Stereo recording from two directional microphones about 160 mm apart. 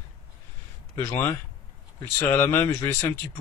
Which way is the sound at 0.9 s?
15° left (ahead or behind).